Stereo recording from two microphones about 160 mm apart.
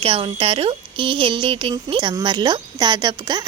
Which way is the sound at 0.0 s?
35° right (ahead or behind).